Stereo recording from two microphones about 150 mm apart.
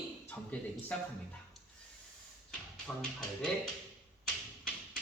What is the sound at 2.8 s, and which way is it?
Speech, 5° left (ahead or behind).